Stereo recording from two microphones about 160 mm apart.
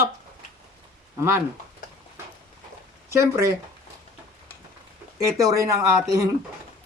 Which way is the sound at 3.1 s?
15° right (ahead or behind).